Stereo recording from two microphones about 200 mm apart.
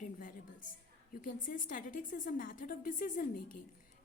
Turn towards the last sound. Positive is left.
turn(degrees=45)  # may be behind; listen again after turning